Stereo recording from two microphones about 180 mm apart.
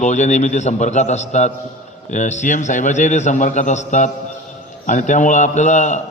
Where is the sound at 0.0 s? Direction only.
40° left (ahead or behind).